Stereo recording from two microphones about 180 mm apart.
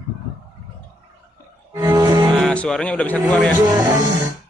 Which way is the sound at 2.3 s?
5° left (ahead or behind).